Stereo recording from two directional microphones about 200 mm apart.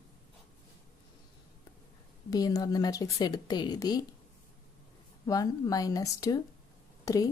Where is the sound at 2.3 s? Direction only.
20° left (ahead or behind).